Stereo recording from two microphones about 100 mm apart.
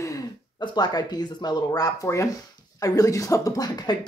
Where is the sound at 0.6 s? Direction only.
45° left (ahead or behind).